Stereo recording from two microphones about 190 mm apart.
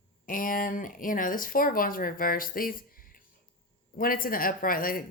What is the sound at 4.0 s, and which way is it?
Speech, 50° left (ahead or behind).